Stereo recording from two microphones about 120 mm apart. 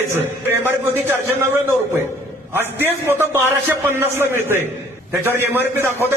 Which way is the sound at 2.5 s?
20° right (ahead or behind).